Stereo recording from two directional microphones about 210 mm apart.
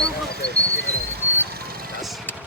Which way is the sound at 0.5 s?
50° right (ahead or behind).